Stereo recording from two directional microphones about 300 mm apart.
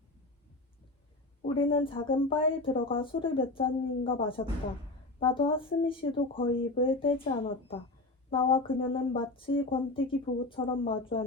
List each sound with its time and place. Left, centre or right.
1.5 s speech: centre